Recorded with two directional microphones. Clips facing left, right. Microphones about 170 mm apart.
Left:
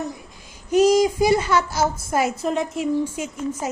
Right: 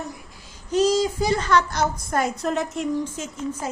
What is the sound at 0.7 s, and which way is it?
A woman's voice, 10° left (ahead or behind).